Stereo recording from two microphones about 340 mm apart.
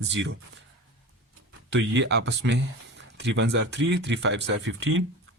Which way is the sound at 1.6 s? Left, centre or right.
Right.